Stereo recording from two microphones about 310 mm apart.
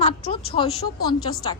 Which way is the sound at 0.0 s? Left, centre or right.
Centre.